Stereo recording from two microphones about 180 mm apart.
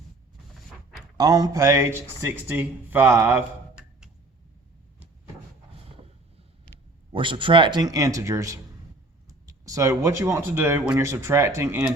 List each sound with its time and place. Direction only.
1.1 s speech: 20° right (ahead or behind)
7.1 s speech: 30° right (ahead or behind)